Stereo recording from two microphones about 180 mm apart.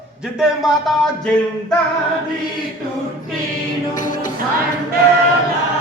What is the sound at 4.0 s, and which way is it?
Music, 45° left (ahead or behind).